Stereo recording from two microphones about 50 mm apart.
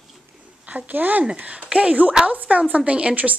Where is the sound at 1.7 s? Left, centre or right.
Centre.